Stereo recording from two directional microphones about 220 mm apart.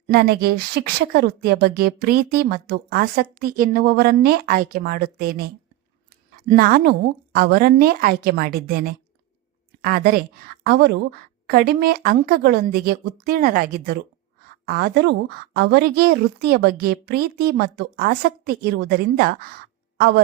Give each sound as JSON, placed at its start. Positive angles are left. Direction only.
{"t": 0.1, "sound": "a woman's voice", "side_deg": -45}
{"t": 6.5, "sound": "a woman's voice", "side_deg": -45}